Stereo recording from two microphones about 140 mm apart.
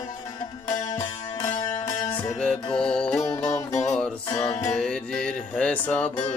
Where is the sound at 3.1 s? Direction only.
20° left (ahead or behind).